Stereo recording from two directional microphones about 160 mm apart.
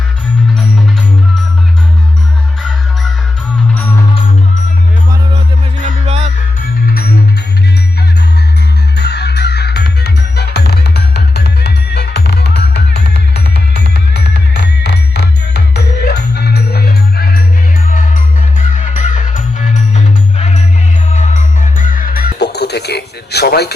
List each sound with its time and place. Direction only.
5.8 s music: 35° right (ahead or behind)
9.0 s music: 90° left; by 17.4 s 70° left (ahead or behind)
17.8 s music: 55° left (ahead or behind); by 23.7 s 90° left